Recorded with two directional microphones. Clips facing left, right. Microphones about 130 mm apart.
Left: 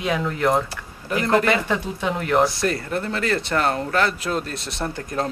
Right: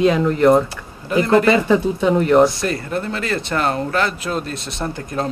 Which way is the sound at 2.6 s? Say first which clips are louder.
Right 1 dB; 20° right (ahead or behind).